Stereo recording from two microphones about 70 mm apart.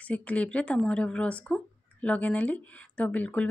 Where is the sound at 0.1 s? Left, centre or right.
Centre.